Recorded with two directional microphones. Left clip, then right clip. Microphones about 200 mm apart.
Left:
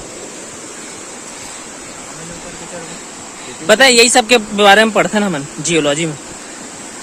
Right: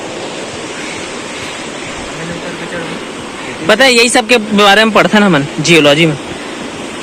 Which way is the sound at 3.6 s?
20° left (ahead or behind).